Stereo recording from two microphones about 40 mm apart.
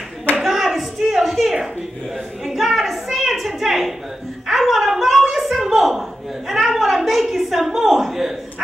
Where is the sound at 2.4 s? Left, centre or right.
Centre.